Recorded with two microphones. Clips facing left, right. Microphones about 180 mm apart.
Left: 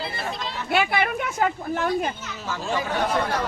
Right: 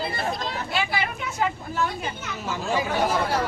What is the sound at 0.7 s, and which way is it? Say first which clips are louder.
Speech: left 7 dB; 55° left (ahead or behind).